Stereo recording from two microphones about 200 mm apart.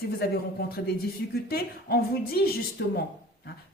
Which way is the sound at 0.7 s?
50° left (ahead or behind).